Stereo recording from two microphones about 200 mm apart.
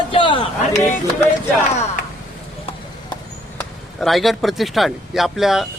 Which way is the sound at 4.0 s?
Centre (ahead or behind).